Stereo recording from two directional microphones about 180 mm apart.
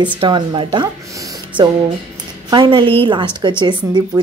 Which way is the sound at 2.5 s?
25° right (ahead or behind).